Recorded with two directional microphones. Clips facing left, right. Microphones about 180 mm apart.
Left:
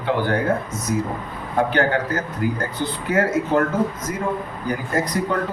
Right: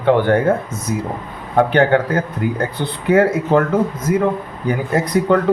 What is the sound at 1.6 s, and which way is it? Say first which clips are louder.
Speech: right 6 dB; 60° right (ahead or behind).